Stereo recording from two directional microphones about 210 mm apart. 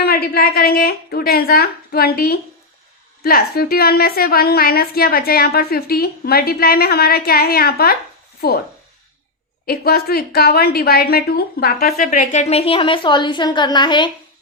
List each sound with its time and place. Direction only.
0.0 s a woman's voice: 45° left (ahead or behind)
9.6 s a woman's voice: 45° left (ahead or behind); by 14.1 s 20° left (ahead or behind)